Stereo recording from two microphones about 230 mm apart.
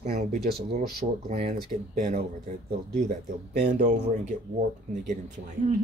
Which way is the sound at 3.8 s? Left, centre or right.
Right.